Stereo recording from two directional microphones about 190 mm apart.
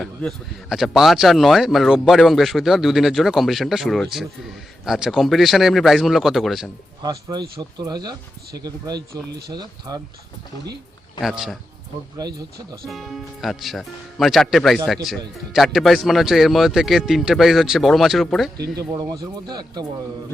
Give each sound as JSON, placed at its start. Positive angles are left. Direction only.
{"t": 0.0, "sound": "speech", "side_deg": 5}
{"t": 7.0, "sound": "speech", "side_deg": -20}
{"t": 9.5, "sound": "speech", "side_deg": -20}
{"t": 11.2, "sound": "speech", "side_deg": 0}
{"t": 12.8, "sound": "speech", "side_deg": 0}
{"t": 18.5, "sound": "speech", "side_deg": -20}